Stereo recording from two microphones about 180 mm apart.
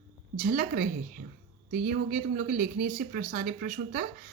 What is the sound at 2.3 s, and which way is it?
Speech, 55° right (ahead or behind).